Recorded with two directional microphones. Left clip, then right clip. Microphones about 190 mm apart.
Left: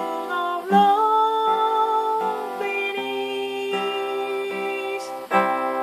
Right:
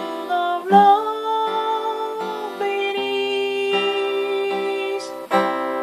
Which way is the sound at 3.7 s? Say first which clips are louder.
Right 3 dB; 30° right (ahead or behind).